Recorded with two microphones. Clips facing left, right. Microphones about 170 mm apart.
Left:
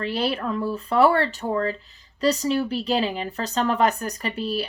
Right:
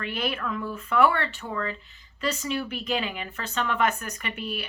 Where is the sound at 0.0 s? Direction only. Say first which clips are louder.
Left 5 dB; 35° left (ahead or behind).